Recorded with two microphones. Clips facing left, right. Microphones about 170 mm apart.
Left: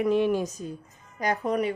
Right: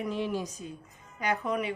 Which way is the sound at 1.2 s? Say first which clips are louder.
Left 4 dB; 40° left (ahead or behind).